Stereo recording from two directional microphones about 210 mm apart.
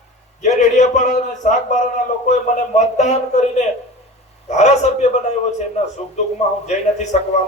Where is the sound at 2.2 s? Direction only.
35° left (ahead or behind).